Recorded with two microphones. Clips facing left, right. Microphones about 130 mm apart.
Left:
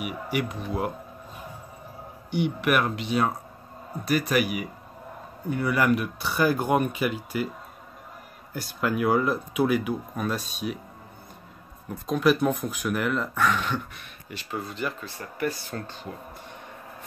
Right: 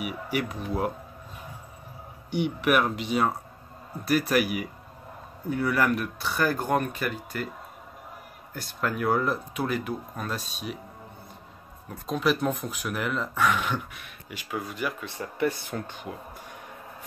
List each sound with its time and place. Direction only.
0.0 s speech: centre (ahead or behind)
2.4 s speech: centre (ahead or behind)
8.5 s speech: 5° left (ahead or behind)
12.1 s speech: centre (ahead or behind)
15.0 s speech: 20° right (ahead or behind)